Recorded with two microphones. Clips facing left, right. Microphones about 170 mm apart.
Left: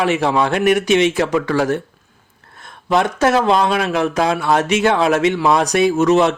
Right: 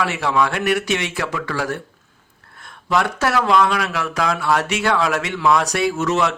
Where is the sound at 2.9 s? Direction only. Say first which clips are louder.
Left 4 dB; 20° left (ahead or behind).